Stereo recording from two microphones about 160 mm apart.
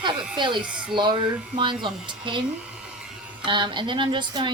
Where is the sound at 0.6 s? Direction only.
5° right (ahead or behind).